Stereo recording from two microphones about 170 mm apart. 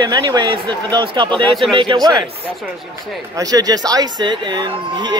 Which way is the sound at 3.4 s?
20° right (ahead or behind).